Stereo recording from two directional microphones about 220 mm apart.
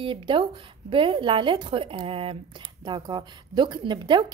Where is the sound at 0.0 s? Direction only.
25° right (ahead or behind).